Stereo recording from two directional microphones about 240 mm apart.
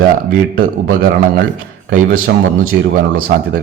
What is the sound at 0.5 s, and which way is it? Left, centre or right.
A man's voice, right.